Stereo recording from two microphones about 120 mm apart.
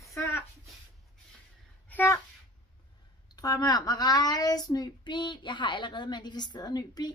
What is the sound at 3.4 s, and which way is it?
Speech, 30° left (ahead or behind).